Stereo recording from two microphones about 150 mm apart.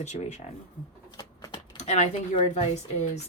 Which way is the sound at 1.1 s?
25° left (ahead or behind).